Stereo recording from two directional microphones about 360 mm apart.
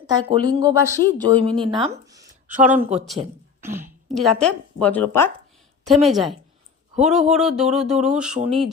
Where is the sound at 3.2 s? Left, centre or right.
Centre.